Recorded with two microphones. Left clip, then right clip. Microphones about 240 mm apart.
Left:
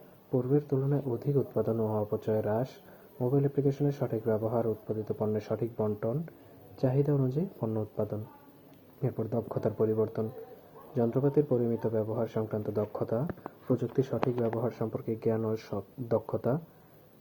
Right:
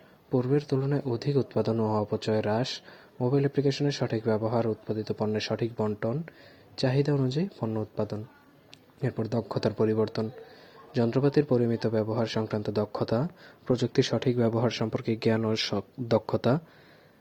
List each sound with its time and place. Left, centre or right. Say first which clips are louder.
0.3 s speech: right 2 dB; right
14.1 s speech: right 4 dB; right